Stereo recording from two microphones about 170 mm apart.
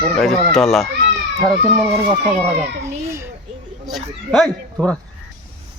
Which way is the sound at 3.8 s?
Centre (ahead or behind).